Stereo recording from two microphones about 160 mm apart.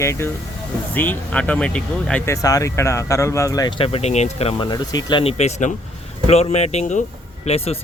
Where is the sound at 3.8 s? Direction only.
40° left (ahead or behind).